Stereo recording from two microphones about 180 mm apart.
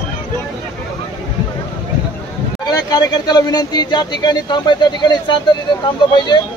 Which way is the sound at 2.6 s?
20° left (ahead or behind).